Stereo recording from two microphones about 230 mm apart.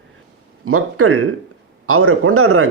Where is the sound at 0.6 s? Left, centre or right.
Right.